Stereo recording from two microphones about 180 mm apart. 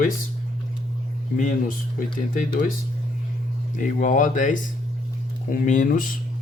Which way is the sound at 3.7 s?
45° left (ahead or behind).